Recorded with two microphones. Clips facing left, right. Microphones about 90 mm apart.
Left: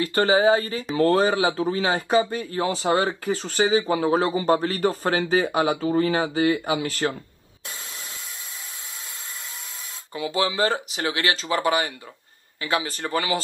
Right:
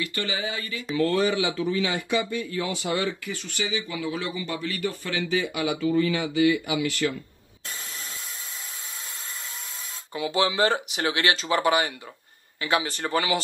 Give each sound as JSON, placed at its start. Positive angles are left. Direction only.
{"t": 0.0, "sound": "speech", "side_deg": 35}
{"t": 10.3, "sound": "speech", "side_deg": -25}
{"t": 11.1, "sound": "speech", "side_deg": 35}
{"t": 13.0, "sound": "speech", "side_deg": -25}